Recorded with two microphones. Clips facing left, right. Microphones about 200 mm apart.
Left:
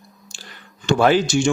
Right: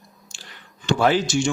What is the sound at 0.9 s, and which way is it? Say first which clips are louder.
Speech: left 3 dB; 60° left (ahead or behind).